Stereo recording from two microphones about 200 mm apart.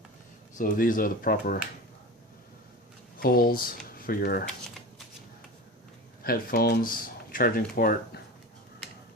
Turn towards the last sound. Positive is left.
turn(degrees=45)  # may be behind; listen again after turning